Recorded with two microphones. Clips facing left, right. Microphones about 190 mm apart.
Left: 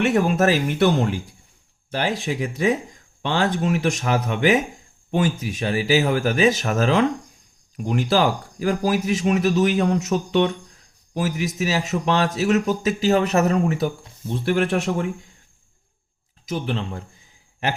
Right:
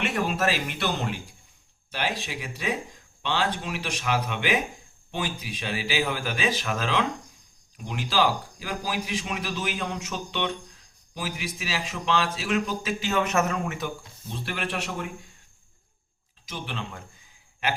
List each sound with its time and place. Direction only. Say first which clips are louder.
0.1 s speech: left 8 dB; 45° left (ahead or behind)
1.9 s speech: left 7 dB; 45° left (ahead or behind)
14.4 s speech: left 11 dB; 50° left (ahead or behind)
16.5 s speech: left 9 dB; 35° left (ahead or behind)